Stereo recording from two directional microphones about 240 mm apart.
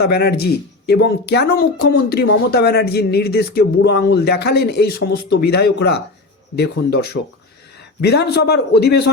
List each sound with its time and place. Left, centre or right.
0.0 s a man's voice: left